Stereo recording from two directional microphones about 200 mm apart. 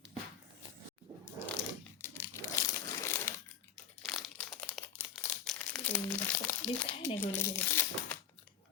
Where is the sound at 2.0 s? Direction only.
10° left (ahead or behind).